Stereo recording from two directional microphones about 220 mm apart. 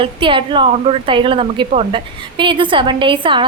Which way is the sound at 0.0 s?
25° right (ahead or behind).